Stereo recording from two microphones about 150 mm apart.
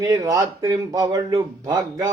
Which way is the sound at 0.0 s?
20° right (ahead or behind).